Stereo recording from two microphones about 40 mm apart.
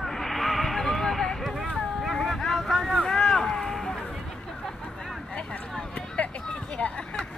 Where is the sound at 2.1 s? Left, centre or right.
Centre.